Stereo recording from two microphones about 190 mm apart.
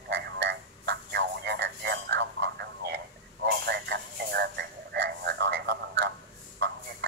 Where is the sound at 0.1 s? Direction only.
60° right (ahead or behind).